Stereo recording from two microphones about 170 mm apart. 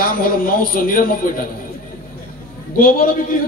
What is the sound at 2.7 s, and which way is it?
Speech, 55° left (ahead or behind).